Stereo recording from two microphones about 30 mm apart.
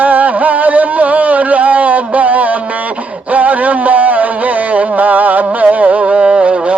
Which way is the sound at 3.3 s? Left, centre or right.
Right.